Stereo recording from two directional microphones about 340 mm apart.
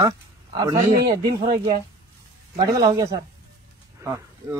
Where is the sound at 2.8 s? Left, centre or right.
Centre.